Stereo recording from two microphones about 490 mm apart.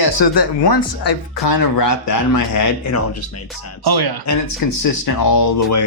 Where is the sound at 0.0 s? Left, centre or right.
Left.